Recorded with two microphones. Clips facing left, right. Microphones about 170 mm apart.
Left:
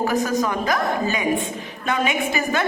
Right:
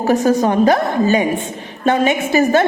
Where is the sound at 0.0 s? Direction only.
40° right (ahead or behind).